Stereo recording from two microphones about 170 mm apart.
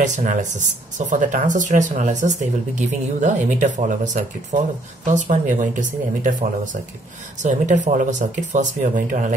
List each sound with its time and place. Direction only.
0.0 s speech: 50° right (ahead or behind)